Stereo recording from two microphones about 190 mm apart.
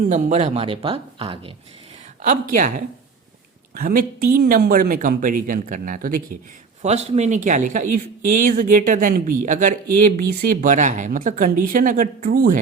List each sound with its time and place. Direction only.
0.0 s speech: 40° right (ahead or behind)
2.2 s speech: 45° right (ahead or behind)
6.8 s speech: 35° right (ahead or behind)